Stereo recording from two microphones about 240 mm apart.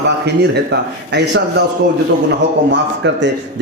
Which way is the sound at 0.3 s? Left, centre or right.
Right.